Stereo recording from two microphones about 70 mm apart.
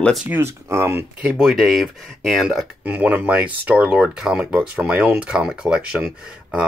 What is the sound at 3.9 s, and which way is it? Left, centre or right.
Speech, centre.